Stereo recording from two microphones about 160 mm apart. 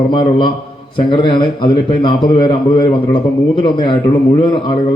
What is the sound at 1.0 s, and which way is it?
A man's voice, 30° left (ahead or behind).